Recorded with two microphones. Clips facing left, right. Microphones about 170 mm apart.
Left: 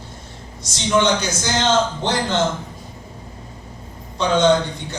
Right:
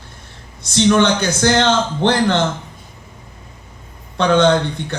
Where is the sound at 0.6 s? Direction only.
60° right (ahead or behind).